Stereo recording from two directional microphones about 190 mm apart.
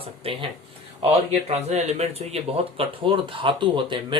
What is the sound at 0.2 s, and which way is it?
Speech, 30° right (ahead or behind).